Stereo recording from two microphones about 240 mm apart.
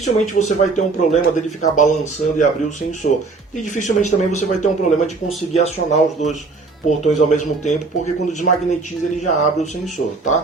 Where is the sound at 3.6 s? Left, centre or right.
Left.